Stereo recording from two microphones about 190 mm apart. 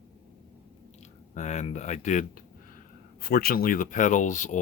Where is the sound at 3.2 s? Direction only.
55° left (ahead or behind).